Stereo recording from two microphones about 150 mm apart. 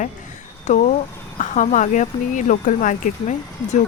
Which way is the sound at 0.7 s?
55° left (ahead or behind).